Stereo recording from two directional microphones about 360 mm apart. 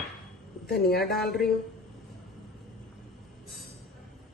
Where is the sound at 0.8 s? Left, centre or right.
Left.